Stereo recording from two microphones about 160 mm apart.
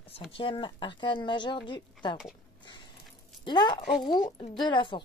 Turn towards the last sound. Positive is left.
turn(degrees=30)  # may be behind; listen again after turning